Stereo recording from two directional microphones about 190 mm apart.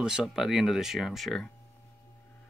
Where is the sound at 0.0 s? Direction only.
5° right (ahead or behind).